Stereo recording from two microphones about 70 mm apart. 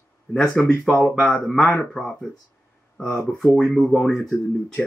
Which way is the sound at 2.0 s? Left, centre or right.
Centre.